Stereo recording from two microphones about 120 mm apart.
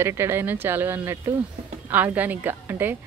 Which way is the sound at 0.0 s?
20° right (ahead or behind).